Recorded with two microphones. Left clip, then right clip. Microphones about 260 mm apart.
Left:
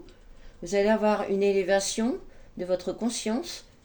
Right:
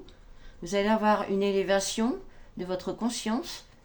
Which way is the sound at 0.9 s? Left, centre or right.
Right.